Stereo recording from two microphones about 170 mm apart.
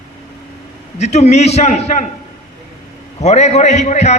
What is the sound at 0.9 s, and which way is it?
A man's voice, 40° left (ahead or behind).